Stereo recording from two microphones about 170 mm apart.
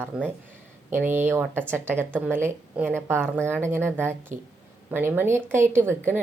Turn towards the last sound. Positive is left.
turn(degrees=-15)  # may be behind; listen again after turning